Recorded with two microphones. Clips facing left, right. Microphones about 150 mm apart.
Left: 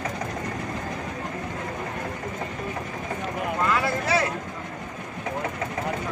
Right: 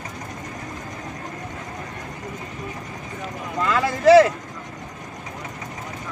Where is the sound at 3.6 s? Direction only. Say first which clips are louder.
Right 12 dB; 90° right.